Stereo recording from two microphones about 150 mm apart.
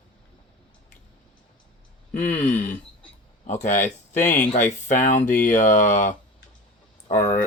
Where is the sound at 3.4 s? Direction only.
55° left (ahead or behind).